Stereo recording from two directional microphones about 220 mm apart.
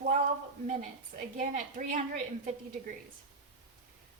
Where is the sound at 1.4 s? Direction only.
35° right (ahead or behind).